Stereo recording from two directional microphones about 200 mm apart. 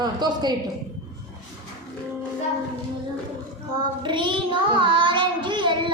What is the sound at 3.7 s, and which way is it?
Child singing, 25° right (ahead or behind).